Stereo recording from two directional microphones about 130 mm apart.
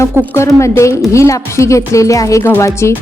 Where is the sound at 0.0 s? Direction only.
20° left (ahead or behind).